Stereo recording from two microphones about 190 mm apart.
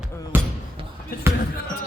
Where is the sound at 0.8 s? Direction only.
30° right (ahead or behind).